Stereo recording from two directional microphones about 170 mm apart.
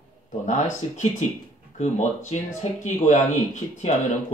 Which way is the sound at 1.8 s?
45° left (ahead or behind).